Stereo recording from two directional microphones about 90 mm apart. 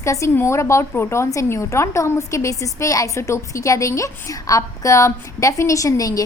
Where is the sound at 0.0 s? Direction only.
35° left (ahead or behind).